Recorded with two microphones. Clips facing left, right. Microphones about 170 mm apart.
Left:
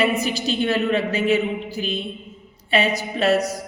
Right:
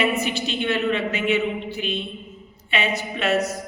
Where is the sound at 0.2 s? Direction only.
40° left (ahead or behind).